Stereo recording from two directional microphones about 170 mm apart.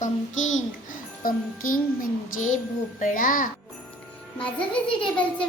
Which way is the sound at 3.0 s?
50° left (ahead or behind).